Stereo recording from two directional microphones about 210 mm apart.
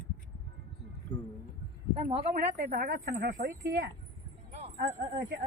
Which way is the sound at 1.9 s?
30° right (ahead or behind).